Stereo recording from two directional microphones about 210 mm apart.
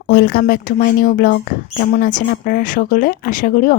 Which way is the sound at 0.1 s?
45° left (ahead or behind).